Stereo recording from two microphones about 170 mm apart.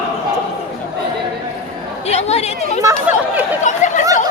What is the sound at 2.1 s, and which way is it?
Chatter, 40° left (ahead or behind).